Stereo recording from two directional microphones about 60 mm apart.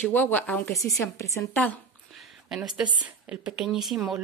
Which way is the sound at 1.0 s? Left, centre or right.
Left.